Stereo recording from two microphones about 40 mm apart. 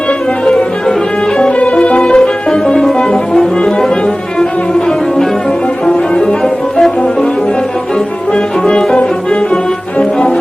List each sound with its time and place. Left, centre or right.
0.4 s music: centre
3.0 s brass instrument: centre
5.8 s music: centre
8.3 s music: left